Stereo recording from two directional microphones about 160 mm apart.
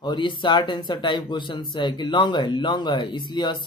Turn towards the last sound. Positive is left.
turn(degrees=30)  # may be behind; listen again after turning